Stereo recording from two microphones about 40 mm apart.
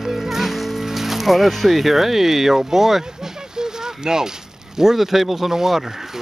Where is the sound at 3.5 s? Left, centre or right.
Centre.